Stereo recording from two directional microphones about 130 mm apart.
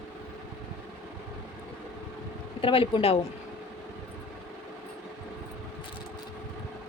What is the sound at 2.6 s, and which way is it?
Speech, 45° left (ahead or behind).